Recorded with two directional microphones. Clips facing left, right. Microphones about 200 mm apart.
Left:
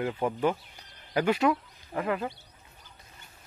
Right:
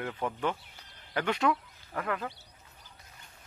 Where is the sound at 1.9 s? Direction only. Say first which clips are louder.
Left 4 dB; 20° left (ahead or behind).